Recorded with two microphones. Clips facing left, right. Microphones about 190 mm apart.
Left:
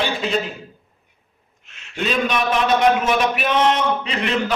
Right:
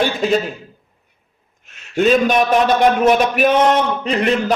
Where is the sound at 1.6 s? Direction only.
45° right (ahead or behind).